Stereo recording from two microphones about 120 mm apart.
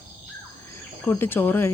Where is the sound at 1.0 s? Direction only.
20° left (ahead or behind).